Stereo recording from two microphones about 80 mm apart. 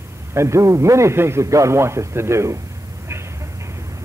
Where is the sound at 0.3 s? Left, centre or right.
Right.